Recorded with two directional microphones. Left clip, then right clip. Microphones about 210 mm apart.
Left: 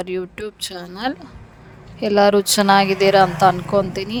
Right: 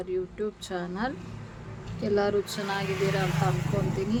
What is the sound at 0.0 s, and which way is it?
Speech, 50° left (ahead or behind).